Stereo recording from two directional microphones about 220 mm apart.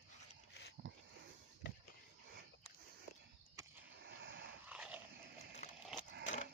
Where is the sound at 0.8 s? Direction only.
50° right (ahead or behind).